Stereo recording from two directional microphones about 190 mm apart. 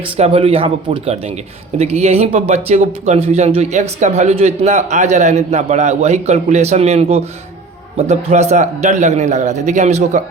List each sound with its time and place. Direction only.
0.0 s speech: 30° right (ahead or behind)